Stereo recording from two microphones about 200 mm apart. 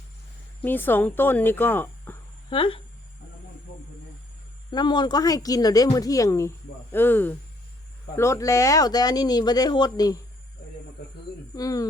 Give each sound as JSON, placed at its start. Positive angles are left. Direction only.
{"t": 0.6, "sound": "speech", "side_deg": 10}
{"t": 2.5, "sound": "speech", "side_deg": 25}
{"t": 4.7, "sound": "speech", "side_deg": 20}
{"t": 11.5, "sound": "speech", "side_deg": 15}